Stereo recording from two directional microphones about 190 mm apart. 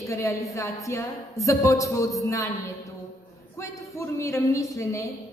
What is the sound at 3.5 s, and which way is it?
A woman's voice, 15° left (ahead or behind).